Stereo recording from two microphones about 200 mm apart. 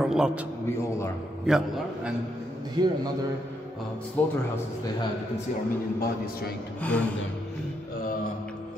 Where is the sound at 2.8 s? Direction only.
20° right (ahead or behind).